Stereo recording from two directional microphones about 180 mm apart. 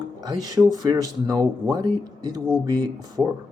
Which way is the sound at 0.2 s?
20° right (ahead or behind).